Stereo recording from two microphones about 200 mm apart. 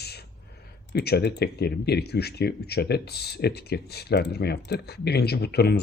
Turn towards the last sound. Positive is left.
turn(degrees=55)  # may be behind; listen again after turning